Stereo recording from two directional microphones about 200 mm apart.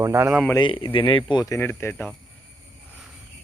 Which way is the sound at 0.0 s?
10° right (ahead or behind).